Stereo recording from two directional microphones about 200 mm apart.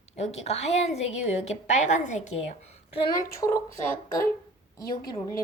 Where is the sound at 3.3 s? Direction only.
15° left (ahead or behind).